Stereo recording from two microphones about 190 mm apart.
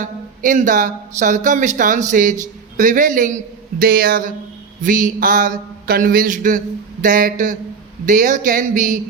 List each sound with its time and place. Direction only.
0.0 s speech: 45° right (ahead or behind)